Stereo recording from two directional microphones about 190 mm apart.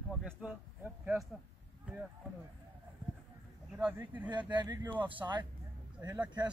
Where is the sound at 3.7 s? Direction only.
10° right (ahead or behind).